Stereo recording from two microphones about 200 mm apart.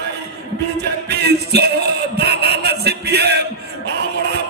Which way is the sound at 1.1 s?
55° right (ahead or behind).